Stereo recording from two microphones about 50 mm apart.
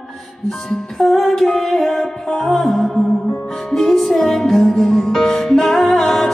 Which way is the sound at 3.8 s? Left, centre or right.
Centre.